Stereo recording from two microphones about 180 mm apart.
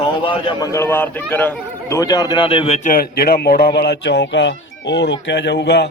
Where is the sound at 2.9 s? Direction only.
55° left (ahead or behind).